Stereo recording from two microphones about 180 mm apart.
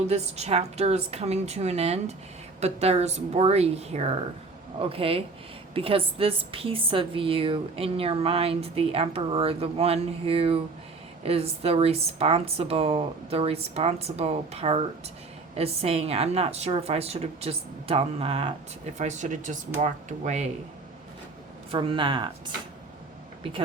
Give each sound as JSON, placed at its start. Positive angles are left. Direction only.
{"t": 0.1, "sound": "a woman's voice", "side_deg": -35}
{"t": 21.7, "sound": "speech", "side_deg": -30}